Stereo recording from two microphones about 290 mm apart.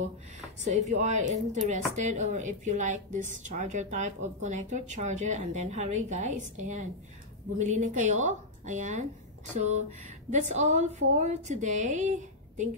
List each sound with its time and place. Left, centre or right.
0.7 s speech: right